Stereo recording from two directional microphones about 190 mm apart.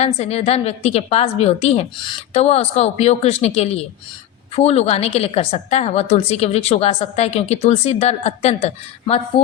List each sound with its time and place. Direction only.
0.0 s a woman's voice: 35° left (ahead or behind)